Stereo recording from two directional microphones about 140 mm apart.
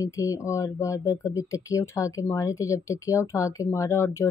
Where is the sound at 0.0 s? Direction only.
25° left (ahead or behind).